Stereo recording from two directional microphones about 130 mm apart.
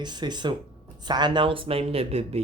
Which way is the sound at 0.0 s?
35° right (ahead or behind).